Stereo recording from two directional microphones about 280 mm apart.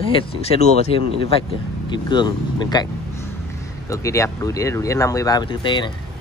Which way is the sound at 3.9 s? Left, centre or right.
Centre.